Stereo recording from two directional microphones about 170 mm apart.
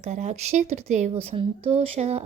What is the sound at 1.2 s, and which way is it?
A woman's voice, 35° right (ahead or behind).